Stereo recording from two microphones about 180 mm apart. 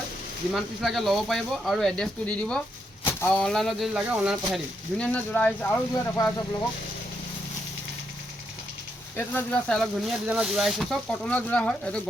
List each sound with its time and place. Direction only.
0.5 s speech: centre (ahead or behind)
4.9 s speech: 5° left (ahead or behind)
9.1 s speech: 10° left (ahead or behind)